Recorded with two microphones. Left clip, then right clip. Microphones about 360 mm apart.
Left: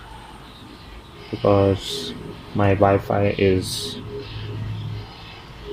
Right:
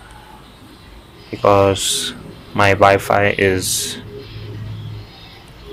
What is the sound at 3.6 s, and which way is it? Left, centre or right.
Speech, centre.